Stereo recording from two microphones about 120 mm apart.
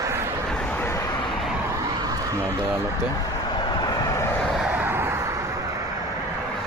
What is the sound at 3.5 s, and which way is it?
Vehicle, 35° left (ahead or behind).